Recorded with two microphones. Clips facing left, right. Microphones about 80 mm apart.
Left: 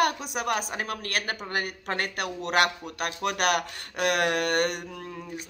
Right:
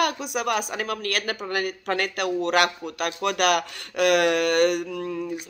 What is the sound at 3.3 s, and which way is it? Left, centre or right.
A woman's voice, left.